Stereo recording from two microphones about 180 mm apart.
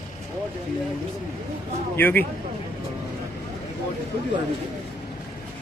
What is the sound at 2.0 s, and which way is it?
Speech, 10° left (ahead or behind).